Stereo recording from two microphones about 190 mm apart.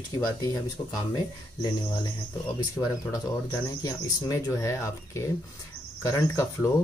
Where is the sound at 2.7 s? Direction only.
15° left (ahead or behind).